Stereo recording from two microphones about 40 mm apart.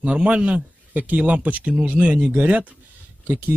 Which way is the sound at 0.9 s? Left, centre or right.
Right.